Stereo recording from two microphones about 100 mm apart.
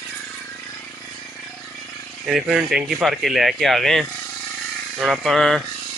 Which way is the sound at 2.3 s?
5° right (ahead or behind).